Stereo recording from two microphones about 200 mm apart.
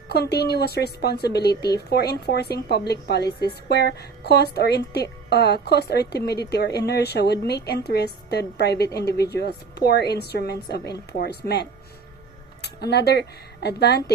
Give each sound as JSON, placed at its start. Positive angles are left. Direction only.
{"t": 0.1, "sound": "a woman's voice", "side_deg": 55}